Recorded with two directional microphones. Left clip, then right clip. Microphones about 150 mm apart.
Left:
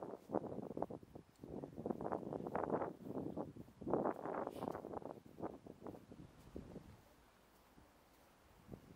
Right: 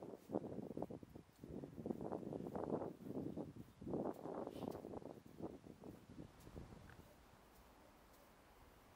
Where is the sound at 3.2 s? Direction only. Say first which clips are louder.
Left 3 dB; 35° left (ahead or behind).